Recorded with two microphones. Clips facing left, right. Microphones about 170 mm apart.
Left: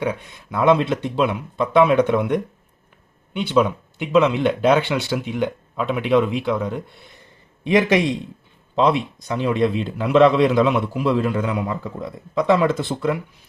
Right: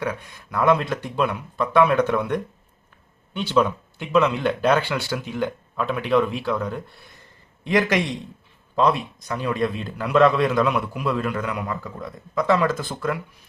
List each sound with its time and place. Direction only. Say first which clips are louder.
0.0 s speech: left 4 dB; 20° left (ahead or behind)